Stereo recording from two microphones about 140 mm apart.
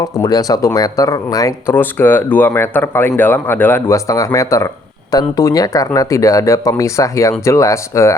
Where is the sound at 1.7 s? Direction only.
15° left (ahead or behind).